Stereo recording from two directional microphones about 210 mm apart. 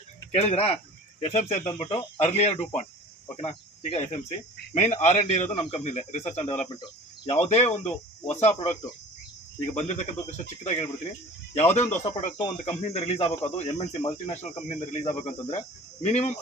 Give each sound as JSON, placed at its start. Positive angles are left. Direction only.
{"t": 0.3, "sound": "a man's voice", "side_deg": 30}
{"t": 3.3, "sound": "cricket", "side_deg": 30}
{"t": 4.8, "sound": "a man's voice", "side_deg": 30}